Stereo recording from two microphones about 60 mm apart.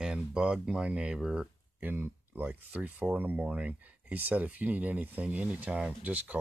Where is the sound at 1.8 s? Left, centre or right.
Right.